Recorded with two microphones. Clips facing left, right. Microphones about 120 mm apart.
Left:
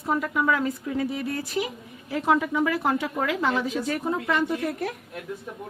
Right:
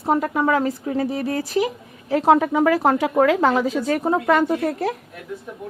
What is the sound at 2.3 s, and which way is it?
Speech, 60° right (ahead or behind).